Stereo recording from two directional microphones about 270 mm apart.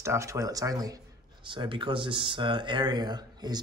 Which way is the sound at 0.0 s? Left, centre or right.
Centre.